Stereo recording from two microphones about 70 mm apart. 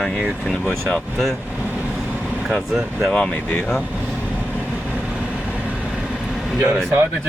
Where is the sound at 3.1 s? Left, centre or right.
Centre.